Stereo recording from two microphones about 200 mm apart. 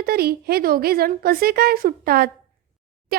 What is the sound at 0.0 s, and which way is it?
A woman's voice, 50° right (ahead or behind).